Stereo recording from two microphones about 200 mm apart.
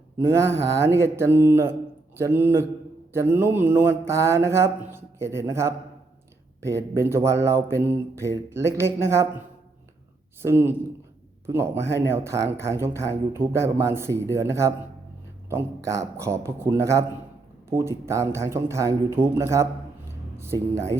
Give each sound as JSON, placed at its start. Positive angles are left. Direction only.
{"t": 0.3, "sound": "speech", "side_deg": -15}
{"t": 10.4, "sound": "speech", "side_deg": -10}